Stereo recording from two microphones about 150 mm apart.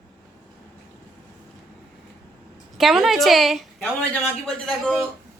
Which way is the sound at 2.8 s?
Centre (ahead or behind).